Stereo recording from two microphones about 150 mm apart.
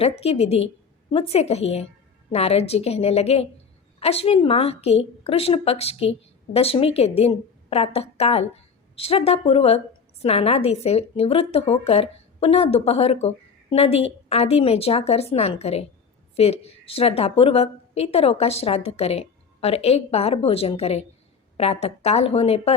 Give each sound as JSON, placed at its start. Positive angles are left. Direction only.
{"t": 0.0, "sound": "a woman's voice", "side_deg": 40}